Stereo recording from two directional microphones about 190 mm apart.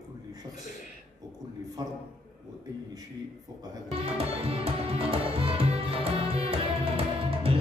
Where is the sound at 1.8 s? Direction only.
20° right (ahead or behind).